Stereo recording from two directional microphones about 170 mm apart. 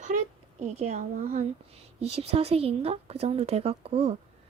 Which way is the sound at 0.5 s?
40° right (ahead or behind).